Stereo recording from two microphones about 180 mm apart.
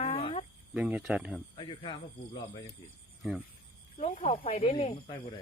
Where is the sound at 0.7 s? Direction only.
5° right (ahead or behind).